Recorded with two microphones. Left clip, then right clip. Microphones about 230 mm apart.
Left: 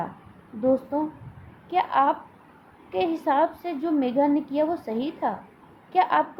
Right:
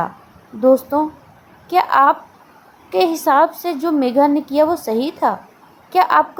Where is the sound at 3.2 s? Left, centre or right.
Right.